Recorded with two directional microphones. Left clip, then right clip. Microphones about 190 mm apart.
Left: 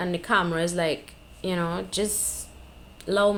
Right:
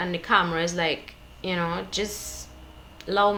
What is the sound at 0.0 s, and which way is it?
Speech, 45° left (ahead or behind).